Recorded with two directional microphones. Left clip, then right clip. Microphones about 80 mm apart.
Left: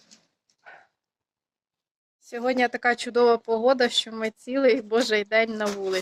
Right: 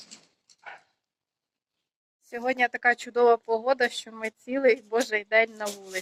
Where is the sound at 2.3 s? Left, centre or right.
Left.